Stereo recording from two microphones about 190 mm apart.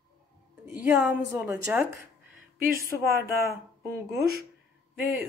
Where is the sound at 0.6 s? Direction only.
10° right (ahead or behind).